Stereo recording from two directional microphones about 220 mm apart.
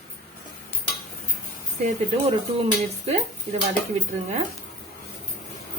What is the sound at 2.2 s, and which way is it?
Speech, 30° right (ahead or behind).